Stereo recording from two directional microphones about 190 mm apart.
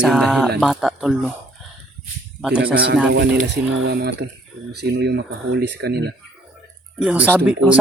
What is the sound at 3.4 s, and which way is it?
Speech, 65° right (ahead or behind).